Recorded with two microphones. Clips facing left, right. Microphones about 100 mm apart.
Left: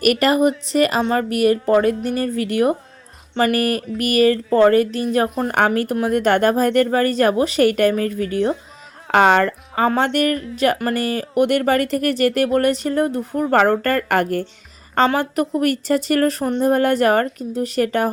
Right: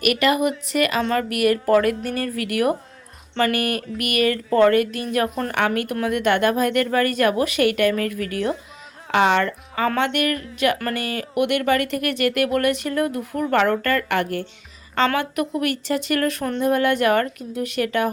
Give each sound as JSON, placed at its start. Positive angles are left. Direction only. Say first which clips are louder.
{"t": 0.0, "sound": "speech", "louder": "left 4 dB", "side_deg": 40}
{"t": 9.1, "sound": "speech", "louder": "left 4 dB", "side_deg": 45}